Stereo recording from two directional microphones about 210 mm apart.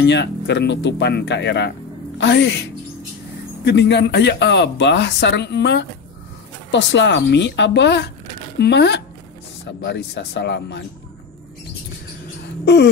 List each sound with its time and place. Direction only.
0.0 s speech: 55° left (ahead or behind)
12.6 s speech: 55° left (ahead or behind)